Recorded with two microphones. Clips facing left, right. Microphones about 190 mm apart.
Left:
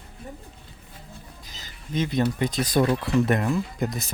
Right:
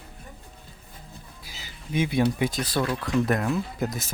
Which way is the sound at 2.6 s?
20° left (ahead or behind).